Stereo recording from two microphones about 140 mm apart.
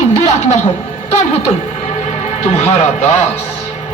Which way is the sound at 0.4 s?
55° left (ahead or behind).